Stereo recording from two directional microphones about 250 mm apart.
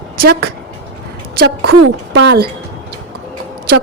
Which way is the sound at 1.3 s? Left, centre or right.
Right.